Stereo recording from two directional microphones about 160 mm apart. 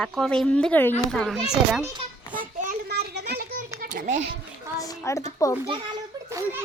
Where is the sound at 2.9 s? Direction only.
90° right; by 3.6 s 70° right (ahead or behind).